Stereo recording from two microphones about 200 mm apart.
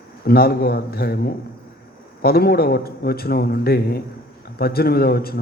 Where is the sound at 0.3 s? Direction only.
50° left (ahead or behind).